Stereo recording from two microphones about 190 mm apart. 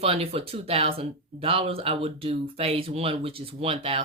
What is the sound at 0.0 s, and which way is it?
Speech, 30° right (ahead or behind).